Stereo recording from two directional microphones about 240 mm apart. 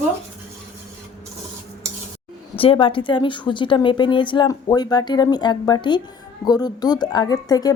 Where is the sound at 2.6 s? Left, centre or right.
Left.